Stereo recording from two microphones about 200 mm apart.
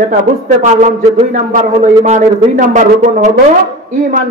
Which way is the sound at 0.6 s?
35° right (ahead or behind).